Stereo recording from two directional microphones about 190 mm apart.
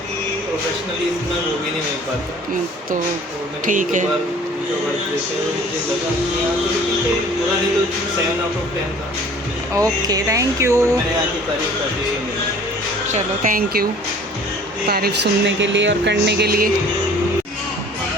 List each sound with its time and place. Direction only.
3.7 s speech: 40° right (ahead or behind)
9.7 s speech: 20° right (ahead or behind)
13.1 s speech: 40° right (ahead or behind)
14.8 s speech: 55° right (ahead or behind)